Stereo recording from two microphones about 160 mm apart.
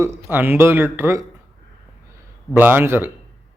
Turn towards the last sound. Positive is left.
turn(degrees=-15)  # may be behind; listen again after turning